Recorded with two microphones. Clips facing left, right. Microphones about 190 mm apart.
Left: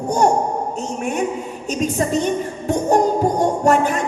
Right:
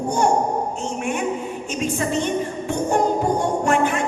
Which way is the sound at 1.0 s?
40° left (ahead or behind).